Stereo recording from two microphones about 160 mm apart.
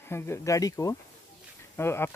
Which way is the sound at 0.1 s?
20° left (ahead or behind).